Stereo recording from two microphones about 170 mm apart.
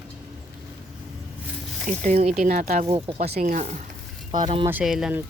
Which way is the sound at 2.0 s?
40° right (ahead or behind).